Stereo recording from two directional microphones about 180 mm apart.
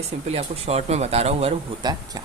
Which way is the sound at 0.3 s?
35° right (ahead or behind).